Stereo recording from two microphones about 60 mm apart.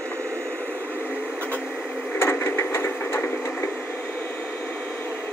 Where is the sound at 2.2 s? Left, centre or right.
Left.